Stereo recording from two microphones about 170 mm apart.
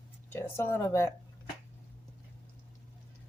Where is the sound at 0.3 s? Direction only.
15° left (ahead or behind).